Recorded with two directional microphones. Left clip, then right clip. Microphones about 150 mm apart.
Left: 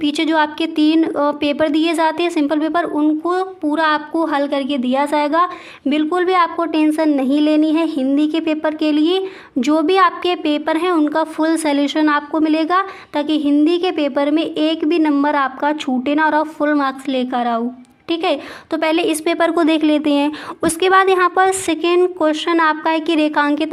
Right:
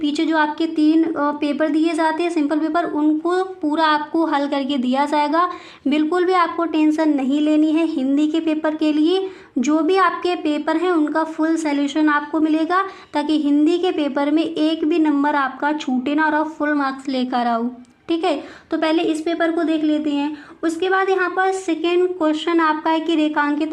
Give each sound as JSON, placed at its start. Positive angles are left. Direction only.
{"t": 0.0, "sound": "speech", "side_deg": 30}
{"t": 18.7, "sound": "a woman's voice", "side_deg": 35}
{"t": 19.2, "sound": "speech", "side_deg": 60}